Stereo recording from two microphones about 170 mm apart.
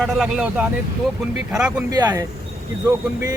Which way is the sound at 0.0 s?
5° right (ahead or behind).